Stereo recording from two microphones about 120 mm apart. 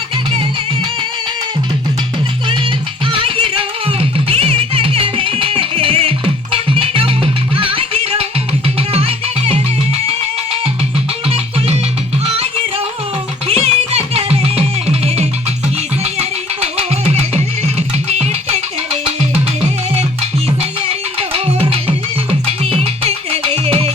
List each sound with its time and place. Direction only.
3.1 s music: 50° right (ahead or behind)
12.2 s music: 55° right (ahead or behind)
20.6 s music: 55° right (ahead or behind)